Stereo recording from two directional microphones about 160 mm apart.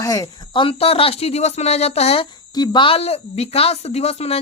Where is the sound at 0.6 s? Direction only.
35° left (ahead or behind).